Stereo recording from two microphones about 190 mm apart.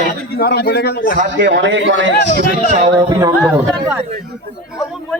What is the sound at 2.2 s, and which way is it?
Speech, 50° left (ahead or behind).